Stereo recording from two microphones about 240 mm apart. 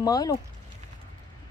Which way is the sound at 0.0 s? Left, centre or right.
Centre.